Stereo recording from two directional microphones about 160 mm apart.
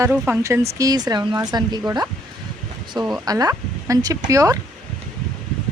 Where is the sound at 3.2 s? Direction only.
25° right (ahead or behind).